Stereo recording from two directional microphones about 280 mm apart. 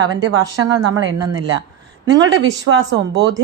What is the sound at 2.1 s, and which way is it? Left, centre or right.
Speech, right.